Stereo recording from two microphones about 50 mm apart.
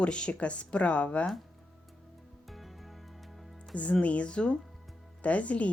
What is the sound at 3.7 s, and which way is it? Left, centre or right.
Speech, left.